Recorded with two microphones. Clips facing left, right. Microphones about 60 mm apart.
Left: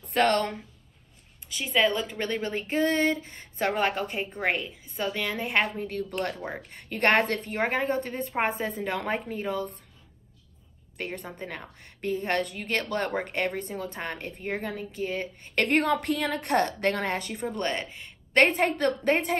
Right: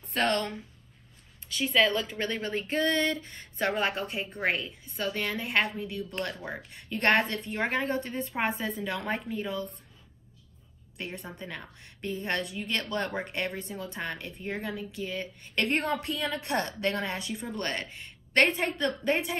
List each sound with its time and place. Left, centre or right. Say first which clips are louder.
0.2 s a woman's voice: left 4 dB; left
1.7 s a woman's voice: left 1 dB; centre
2.1 s a woman's voice: left 2 dB; left
4.0 s a woman's voice: left 3 dB; left
4.3 s a woman's voice: even; centre
4.6 s a woman's voice: left 2 dB; left
5.9 s a woman's voice: left 4 dB; left
6.3 s a woman's voice: left 2 dB; left
11.0 s a woman's voice: left 3 dB; left
15.7 s a woman's voice: left 7 dB; left
16.3 s a woman's voice: left 5 dB; left